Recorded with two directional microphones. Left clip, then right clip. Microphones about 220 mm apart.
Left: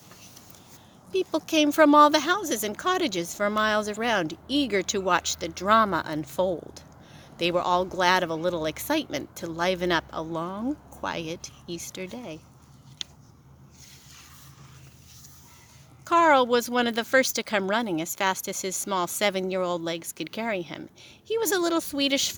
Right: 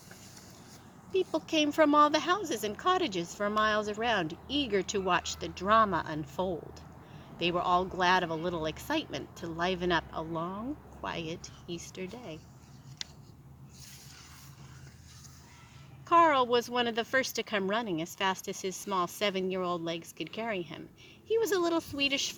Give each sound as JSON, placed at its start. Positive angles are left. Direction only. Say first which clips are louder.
{"t": 1.1, "sound": "speech", "louder": "left 5 dB", "side_deg": 50}
{"t": 16.0, "sound": "speech", "louder": "left 4 dB", "side_deg": 50}